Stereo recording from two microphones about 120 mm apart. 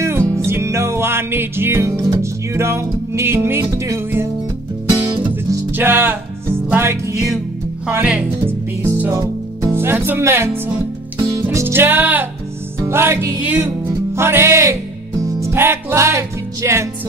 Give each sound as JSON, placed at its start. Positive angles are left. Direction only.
{"t": 0.0, "sound": "music", "side_deg": -20}
{"t": 5.7, "sound": "music", "side_deg": -15}
{"t": 9.6, "sound": "speech", "side_deg": -20}
{"t": 11.4, "sound": "music", "side_deg": -20}
{"t": 15.4, "sound": "speech", "side_deg": -20}